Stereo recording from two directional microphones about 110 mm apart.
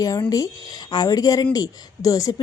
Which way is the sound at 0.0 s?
35° left (ahead or behind).